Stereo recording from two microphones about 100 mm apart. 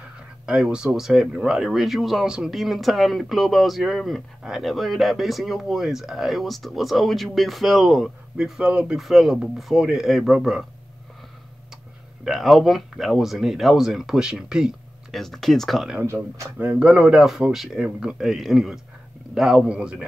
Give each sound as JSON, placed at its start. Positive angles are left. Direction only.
{"t": 0.5, "sound": "speech", "side_deg": -10}
{"t": 12.3, "sound": "speech", "side_deg": 0}
{"t": 16.0, "sound": "speech", "side_deg": -25}
{"t": 16.6, "sound": "a man's voice", "side_deg": -10}